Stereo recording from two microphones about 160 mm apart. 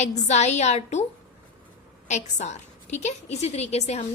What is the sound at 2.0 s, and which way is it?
A woman's voice, 45° left (ahead or behind).